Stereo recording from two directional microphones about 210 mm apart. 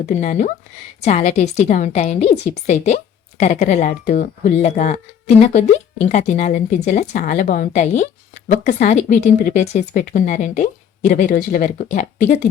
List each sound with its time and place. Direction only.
0.0 s speech: 35° left (ahead or behind)